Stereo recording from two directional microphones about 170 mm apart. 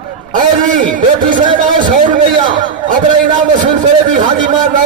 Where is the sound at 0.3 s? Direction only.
50° right (ahead or behind).